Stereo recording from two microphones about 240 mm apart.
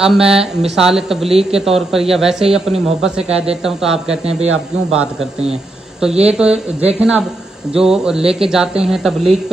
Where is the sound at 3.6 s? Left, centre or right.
Centre.